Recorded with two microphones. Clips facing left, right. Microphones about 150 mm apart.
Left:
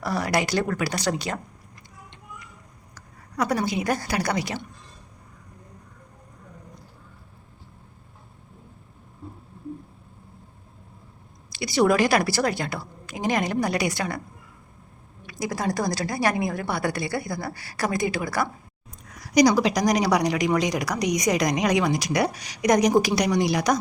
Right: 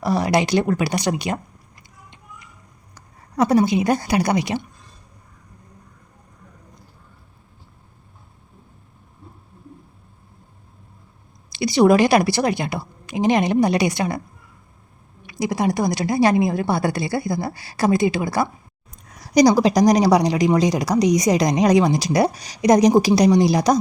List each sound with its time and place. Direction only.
0.0 s a woman's voice: 20° right (ahead or behind)
3.3 s a woman's voice: 25° right (ahead or behind)
11.5 s a woman's voice: 20° right (ahead or behind)
15.3 s a woman's voice: 20° right (ahead or behind)